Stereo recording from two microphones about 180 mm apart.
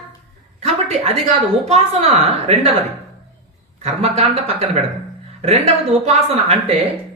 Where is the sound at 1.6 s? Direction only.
35° right (ahead or behind).